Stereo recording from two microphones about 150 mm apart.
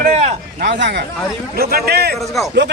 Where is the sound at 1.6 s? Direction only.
90° right.